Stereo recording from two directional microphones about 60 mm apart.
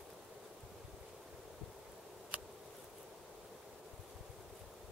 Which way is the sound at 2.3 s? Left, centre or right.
Right.